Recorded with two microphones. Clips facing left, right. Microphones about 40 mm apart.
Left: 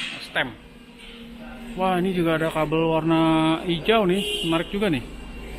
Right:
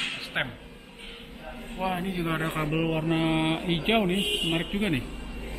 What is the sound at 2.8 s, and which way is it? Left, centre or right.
Mantra, centre.